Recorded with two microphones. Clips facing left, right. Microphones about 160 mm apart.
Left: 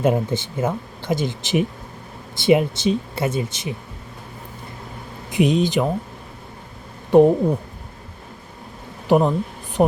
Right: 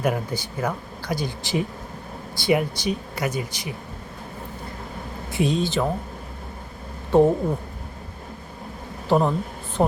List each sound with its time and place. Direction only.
0.0 s speech: 25° left (ahead or behind)
5.3 s speech: 20° left (ahead or behind)
7.1 s a woman's voice: 15° left (ahead or behind)
9.0 s speech: 15° left (ahead or behind)